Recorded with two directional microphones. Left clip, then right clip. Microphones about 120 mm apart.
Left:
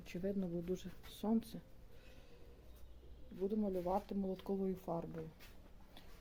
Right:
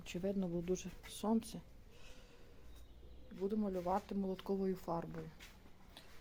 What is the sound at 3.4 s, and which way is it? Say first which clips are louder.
Speech: even; 20° left (ahead or behind).